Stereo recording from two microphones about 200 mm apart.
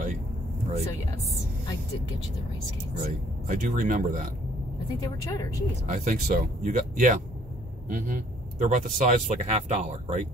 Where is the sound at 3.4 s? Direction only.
40° right (ahead or behind).